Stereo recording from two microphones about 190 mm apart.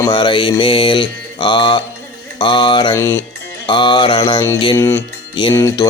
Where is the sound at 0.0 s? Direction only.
25° left (ahead or behind).